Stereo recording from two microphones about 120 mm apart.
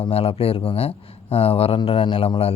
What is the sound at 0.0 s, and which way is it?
Speech, 55° left (ahead or behind).